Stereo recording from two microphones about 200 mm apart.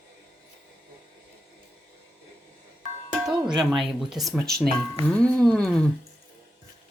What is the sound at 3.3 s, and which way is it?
Speech, centre (ahead or behind).